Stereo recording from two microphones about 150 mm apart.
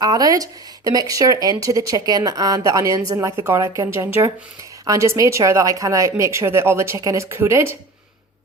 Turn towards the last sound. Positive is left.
turn(degrees=-15)  # may be behind; listen again after turning